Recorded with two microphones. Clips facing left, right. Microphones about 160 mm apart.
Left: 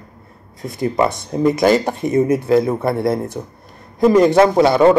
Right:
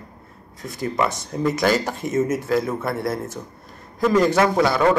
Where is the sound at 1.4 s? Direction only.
20° left (ahead or behind).